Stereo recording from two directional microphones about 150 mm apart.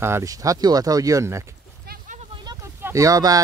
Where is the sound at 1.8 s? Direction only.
70° right (ahead or behind).